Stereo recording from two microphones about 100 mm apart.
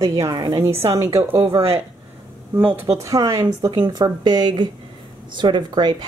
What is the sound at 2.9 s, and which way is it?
Speech, 35° right (ahead or behind).